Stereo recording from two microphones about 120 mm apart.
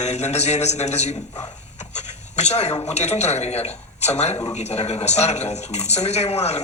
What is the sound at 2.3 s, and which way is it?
A man's voice, 65° left (ahead or behind).